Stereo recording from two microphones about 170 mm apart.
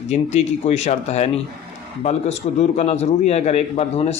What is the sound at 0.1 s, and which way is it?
A man's voice, 40° left (ahead or behind).